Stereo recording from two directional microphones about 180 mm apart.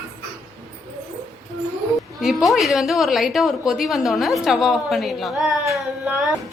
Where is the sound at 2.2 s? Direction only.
Centre (ahead or behind).